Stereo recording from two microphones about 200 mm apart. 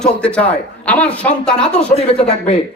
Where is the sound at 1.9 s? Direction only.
30° left (ahead or behind).